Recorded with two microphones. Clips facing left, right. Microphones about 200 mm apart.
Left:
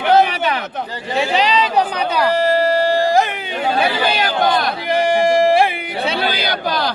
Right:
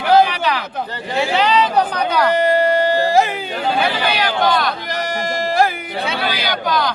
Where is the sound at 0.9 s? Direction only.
10° left (ahead or behind).